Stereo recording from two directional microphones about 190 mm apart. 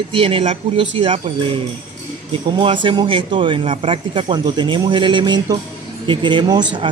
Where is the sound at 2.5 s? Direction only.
25° right (ahead or behind).